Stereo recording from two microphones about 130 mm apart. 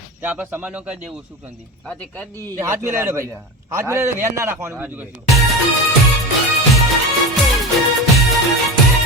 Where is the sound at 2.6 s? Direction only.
20° right (ahead or behind).